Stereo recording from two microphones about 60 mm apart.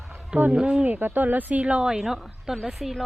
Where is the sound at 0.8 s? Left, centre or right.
Right; by 2.0 s centre.